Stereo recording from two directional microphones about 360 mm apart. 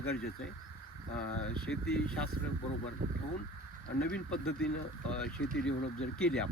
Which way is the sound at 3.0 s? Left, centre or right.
Right.